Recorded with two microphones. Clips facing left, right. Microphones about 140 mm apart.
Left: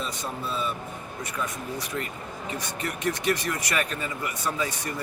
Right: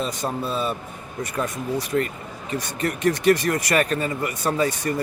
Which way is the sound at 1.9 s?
50° right (ahead or behind).